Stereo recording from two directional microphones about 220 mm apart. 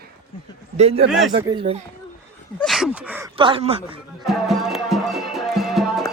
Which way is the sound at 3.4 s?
25° right (ahead or behind).